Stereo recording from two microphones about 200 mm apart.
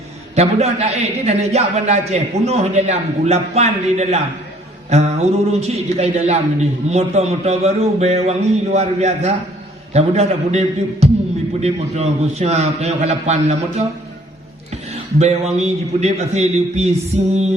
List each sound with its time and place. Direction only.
0.3 s a man's voice: 35° right (ahead or behind)
15.2 s a man's voice: 30° right (ahead or behind)